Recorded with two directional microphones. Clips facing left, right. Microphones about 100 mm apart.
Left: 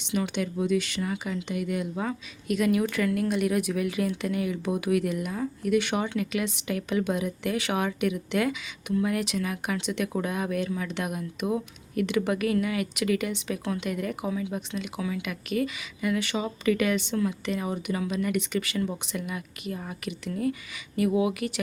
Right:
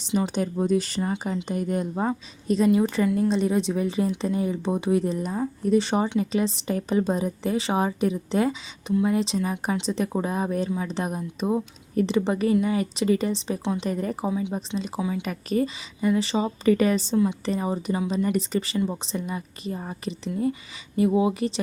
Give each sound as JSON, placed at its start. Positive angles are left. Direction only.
{"t": 0.0, "sound": "speech", "side_deg": -35}